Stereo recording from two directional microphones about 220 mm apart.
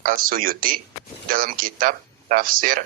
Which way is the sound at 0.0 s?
40° right (ahead or behind).